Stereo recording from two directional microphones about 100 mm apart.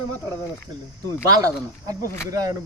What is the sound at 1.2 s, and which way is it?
Speech, 35° right (ahead or behind).